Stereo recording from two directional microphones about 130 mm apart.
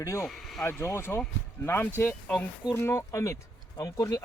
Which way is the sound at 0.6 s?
20° left (ahead or behind).